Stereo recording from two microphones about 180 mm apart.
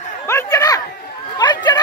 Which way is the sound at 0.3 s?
15° left (ahead or behind).